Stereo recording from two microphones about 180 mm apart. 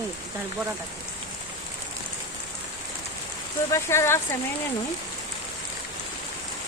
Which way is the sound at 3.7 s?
15° left (ahead or behind).